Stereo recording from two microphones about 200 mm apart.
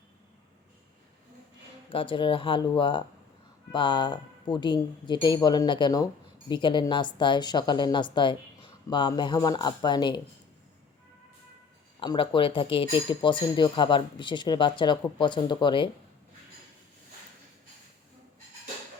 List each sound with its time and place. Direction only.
1.9 s speech: 25° left (ahead or behind)
11.9 s speech: 25° left (ahead or behind)